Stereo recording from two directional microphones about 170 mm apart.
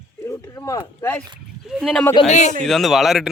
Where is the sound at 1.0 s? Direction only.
10° left (ahead or behind).